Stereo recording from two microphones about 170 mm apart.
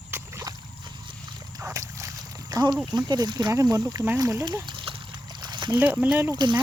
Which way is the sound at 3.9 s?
15° right (ahead or behind).